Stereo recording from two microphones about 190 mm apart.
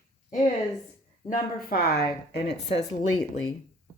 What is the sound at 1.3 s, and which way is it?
A woman's voice, 50° left (ahead or behind).